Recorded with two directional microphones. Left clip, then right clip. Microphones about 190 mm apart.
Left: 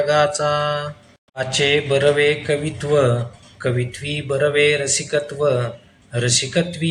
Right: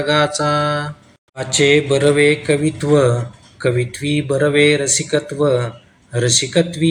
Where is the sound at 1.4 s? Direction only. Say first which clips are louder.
Right 4 dB; 15° right (ahead or behind).